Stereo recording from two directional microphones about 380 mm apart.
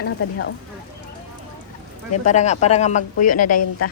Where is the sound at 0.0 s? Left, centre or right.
Left.